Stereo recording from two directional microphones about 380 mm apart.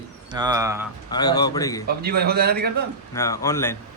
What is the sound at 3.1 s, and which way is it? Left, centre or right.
Speech, centre.